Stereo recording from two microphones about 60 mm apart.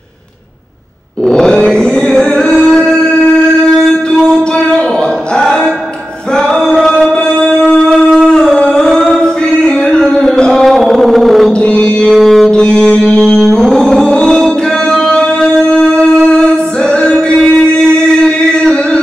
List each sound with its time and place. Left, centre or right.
1.2 s chant: centre
5.4 s music: centre
7.2 s a sound: centre
11.5 s music: centre
12.1 s music: centre
12.4 s music: centre